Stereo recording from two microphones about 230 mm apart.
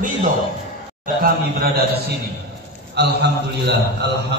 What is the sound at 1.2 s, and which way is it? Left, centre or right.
A man's voice, right.